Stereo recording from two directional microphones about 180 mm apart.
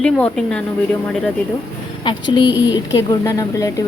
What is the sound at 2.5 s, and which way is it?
Speech, 10° right (ahead or behind).